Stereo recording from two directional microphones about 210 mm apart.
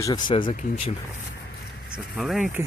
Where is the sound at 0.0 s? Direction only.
20° left (ahead or behind).